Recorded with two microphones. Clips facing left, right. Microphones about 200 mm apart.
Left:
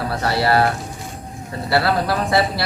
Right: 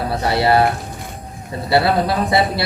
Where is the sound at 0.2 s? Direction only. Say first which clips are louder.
Right 2 dB; 20° right (ahead or behind).